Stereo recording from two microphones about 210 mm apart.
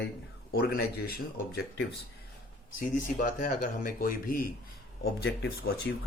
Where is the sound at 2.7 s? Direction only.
40° left (ahead or behind).